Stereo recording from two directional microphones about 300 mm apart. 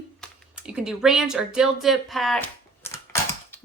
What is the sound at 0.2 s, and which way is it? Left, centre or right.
Speech, centre.